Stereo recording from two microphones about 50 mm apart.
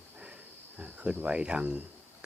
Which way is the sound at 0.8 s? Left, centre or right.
Right.